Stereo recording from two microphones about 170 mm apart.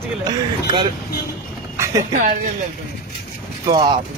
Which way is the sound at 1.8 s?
20° right (ahead or behind).